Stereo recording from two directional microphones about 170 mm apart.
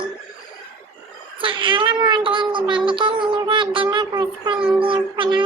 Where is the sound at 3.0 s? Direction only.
30° right (ahead or behind).